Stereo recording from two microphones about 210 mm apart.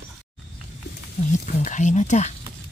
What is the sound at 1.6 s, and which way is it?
Speech, 35° left (ahead or behind).